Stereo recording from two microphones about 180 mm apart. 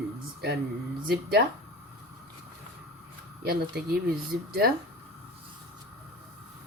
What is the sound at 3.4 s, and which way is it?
Speech, 60° right (ahead or behind).